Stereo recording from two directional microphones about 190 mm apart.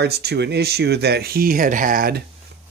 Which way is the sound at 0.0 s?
60° right (ahead or behind).